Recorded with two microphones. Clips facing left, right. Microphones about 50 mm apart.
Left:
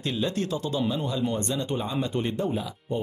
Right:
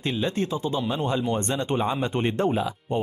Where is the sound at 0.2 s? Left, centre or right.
Right.